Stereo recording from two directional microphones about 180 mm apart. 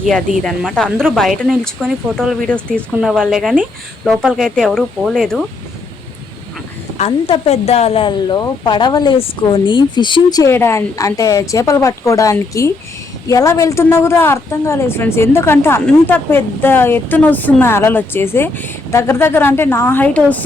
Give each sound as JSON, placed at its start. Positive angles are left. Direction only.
{"t": 0.1, "sound": "speech", "side_deg": 5}
{"t": 6.9, "sound": "a woman's voice", "side_deg": 35}